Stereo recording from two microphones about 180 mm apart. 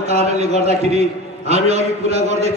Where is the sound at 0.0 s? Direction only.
35° right (ahead or behind).